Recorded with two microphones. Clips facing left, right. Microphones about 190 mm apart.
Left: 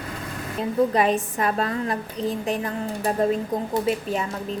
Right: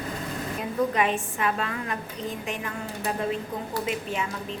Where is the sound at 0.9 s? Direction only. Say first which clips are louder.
Left 5 dB; 40° left (ahead or behind).